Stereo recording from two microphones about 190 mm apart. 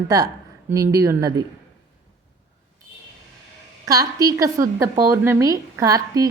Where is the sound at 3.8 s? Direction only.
20° right (ahead or behind).